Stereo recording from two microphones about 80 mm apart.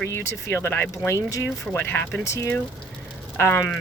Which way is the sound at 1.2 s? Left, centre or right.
Left.